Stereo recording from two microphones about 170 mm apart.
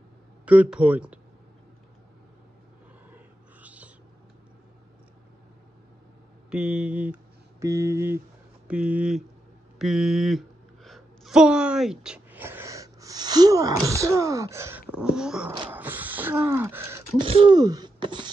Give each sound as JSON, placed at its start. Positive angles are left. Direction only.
{"t": 0.5, "sound": "speech", "side_deg": -5}
{"t": 3.6, "sound": "whispering", "side_deg": -10}
{"t": 6.5, "sound": "speech", "side_deg": -5}
{"t": 15.7, "sound": "gasp", "side_deg": -10}
{"t": 17.2, "sound": "speech", "side_deg": -30}